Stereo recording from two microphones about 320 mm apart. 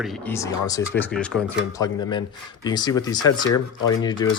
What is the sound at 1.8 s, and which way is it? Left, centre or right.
Speech, centre.